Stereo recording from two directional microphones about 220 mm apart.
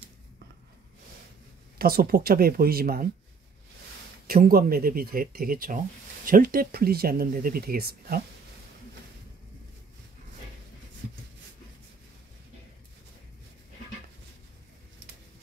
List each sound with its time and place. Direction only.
1.8 s speech: 45° right (ahead or behind)
4.3 s speech: 40° right (ahead or behind)